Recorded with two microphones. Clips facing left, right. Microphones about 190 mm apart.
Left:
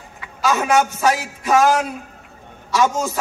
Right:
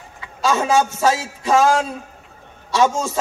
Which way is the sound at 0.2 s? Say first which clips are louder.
Even; 25° right (ahead or behind).